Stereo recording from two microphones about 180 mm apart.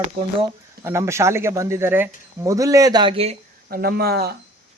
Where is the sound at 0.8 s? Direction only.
15° right (ahead or behind); by 3.4 s 35° right (ahead or behind).